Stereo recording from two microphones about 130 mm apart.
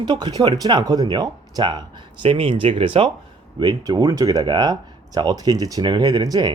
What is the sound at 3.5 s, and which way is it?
Speech, 30° right (ahead or behind).